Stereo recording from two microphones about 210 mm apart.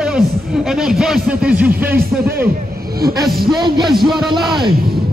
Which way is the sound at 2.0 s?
45° right (ahead or behind).